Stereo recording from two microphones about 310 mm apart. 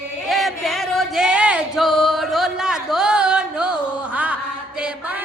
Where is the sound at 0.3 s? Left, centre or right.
Centre.